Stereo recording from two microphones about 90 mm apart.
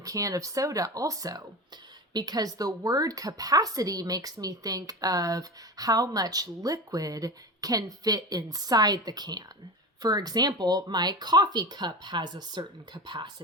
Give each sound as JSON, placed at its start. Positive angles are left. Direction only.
{"t": 0.0, "sound": "speech", "side_deg": -40}